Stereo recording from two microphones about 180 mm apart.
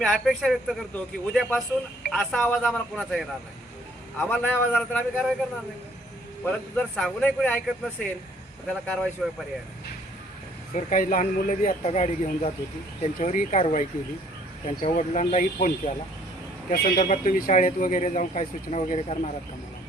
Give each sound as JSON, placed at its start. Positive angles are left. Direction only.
{"t": 0.0, "sound": "a man's voice", "side_deg": 0}
{"t": 6.4, "sound": "a man's voice", "side_deg": 5}
{"t": 8.7, "sound": "a man's voice", "side_deg": 5}
{"t": 10.8, "sound": "speech", "side_deg": 45}